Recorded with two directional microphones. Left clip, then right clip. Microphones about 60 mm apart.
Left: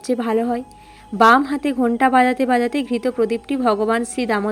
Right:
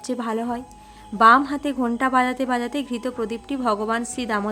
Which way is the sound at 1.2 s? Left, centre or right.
Left.